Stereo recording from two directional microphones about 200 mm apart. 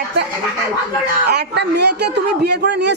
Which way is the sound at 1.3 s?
55° right (ahead or behind).